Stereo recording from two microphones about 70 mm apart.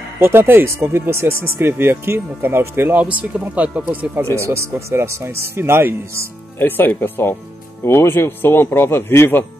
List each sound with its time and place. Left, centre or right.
0.2 s speech: right
3.0 s speech: right
4.4 s speech: right
6.6 s speech: left